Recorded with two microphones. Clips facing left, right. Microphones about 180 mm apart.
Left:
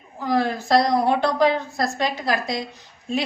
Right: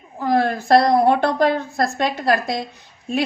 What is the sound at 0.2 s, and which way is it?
A woman's voice, 55° right (ahead or behind).